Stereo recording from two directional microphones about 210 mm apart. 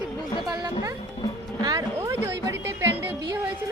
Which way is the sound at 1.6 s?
15° right (ahead or behind).